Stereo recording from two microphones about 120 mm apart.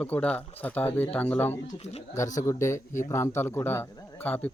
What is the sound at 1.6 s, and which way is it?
Speech, 65° left (ahead or behind).